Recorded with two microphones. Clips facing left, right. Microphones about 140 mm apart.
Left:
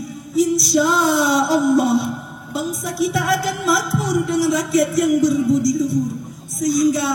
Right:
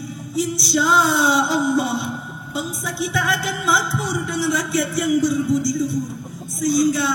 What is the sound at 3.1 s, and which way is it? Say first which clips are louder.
Music: left 3 dB; 30° left (ahead or behind).